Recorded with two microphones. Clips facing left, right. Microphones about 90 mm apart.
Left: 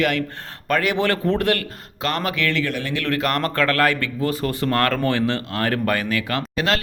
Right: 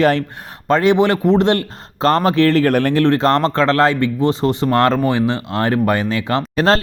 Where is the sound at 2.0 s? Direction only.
30° right (ahead or behind); by 2.9 s 50° right (ahead or behind).